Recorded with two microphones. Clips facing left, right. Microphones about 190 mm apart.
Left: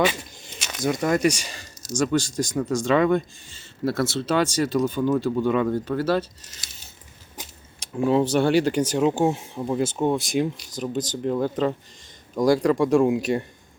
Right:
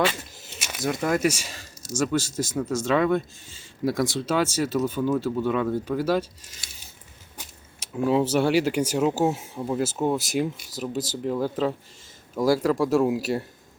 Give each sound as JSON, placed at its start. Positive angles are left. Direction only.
{"t": 0.2, "sound": "speech", "side_deg": -5}
{"t": 7.8, "sound": "speech", "side_deg": -5}